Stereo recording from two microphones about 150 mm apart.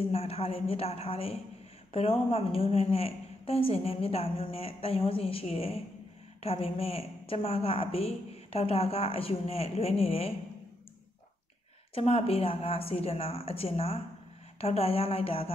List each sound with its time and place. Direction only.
0.1 s a woman's voice: 40° left (ahead or behind)
11.9 s a woman's voice: 40° left (ahead or behind)